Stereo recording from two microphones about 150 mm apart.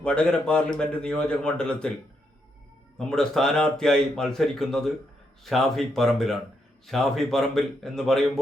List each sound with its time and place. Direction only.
0.0 s a man's voice: 5° left (ahead or behind)
3.0 s speech: 5° left (ahead or behind)